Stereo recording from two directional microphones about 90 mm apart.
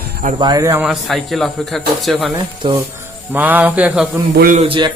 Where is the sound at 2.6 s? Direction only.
75° right (ahead or behind).